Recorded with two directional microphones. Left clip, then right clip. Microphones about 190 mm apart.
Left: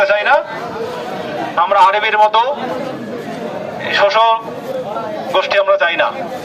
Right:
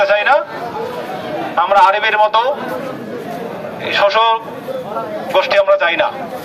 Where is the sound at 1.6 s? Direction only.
15° right (ahead or behind).